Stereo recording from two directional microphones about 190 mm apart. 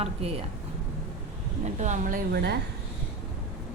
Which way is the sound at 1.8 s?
40° right (ahead or behind).